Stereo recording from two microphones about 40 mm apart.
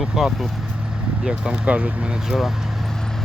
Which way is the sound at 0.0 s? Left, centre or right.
Centre.